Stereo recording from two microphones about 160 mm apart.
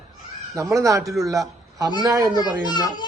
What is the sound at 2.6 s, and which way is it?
Speech, 25° left (ahead or behind).